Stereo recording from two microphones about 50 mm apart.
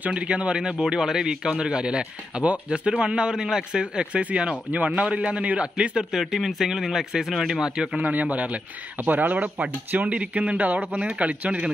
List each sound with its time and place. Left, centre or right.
0.0 s speech: right
6.1 s speech: centre
8.0 s speech: right